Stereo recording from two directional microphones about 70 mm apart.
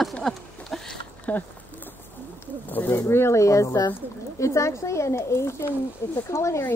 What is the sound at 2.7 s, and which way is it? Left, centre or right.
Speech, left.